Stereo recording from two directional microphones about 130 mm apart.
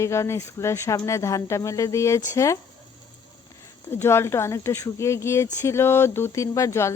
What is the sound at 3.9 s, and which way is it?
Speech, 20° left (ahead or behind).